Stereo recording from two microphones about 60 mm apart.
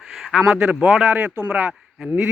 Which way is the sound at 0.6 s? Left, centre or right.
Centre.